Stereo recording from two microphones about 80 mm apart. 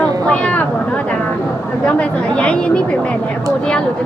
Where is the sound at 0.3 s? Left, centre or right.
Centre.